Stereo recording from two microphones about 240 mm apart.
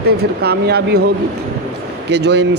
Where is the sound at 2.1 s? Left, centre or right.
Right.